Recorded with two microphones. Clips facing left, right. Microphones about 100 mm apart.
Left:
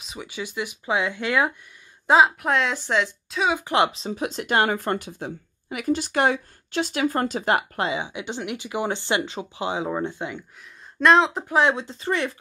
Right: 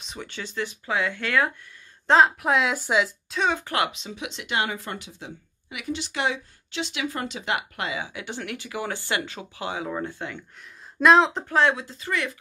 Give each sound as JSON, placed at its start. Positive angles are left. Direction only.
{"t": 0.0, "sound": "speech", "side_deg": 5}
{"t": 2.0, "sound": "a woman's voice", "side_deg": 5}
{"t": 3.6, "sound": "speech", "side_deg": 25}
{"t": 11.0, "sound": "a woman's voice", "side_deg": 0}
{"t": 11.4, "sound": "speech", "side_deg": 15}
{"t": 11.7, "sound": "speech", "side_deg": 30}